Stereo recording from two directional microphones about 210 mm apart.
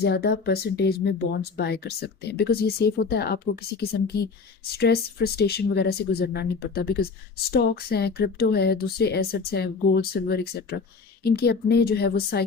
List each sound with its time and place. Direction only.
0.0 s speech: 50° left (ahead or behind)